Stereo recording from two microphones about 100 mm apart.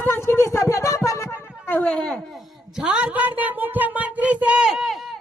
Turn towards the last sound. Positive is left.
turn(degrees=0)  # may be behind; listen again after turning